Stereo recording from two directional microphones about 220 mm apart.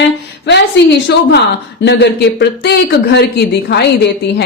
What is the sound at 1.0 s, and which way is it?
Speech, 50° left (ahead or behind).